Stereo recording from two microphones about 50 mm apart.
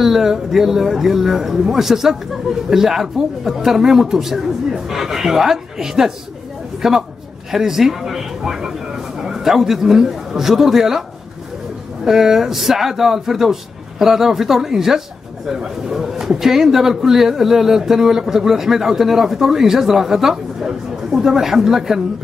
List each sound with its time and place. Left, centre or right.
0.0 s a man's voice: centre